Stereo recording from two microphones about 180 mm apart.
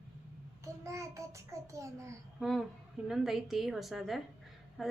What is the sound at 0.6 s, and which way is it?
A child's voice, 15° right (ahead or behind).